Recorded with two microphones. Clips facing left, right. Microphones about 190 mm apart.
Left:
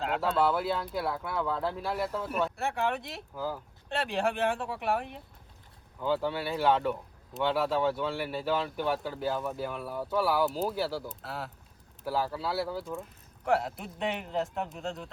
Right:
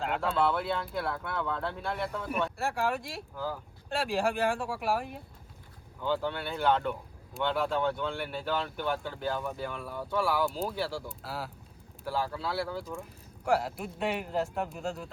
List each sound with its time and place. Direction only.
0.0 s speech: centre (ahead or behind)